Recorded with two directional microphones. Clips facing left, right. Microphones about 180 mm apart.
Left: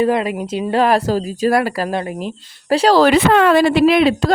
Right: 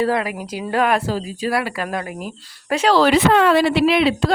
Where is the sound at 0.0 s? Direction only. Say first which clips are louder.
Left 4 dB; 20° left (ahead or behind).